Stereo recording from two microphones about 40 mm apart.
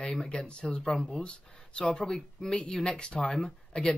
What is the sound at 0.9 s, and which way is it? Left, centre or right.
Speech, centre.